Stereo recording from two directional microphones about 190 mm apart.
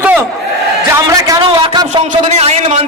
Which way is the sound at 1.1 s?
20° right (ahead or behind).